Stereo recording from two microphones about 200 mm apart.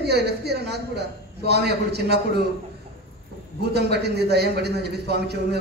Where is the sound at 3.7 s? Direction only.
55° right (ahead or behind).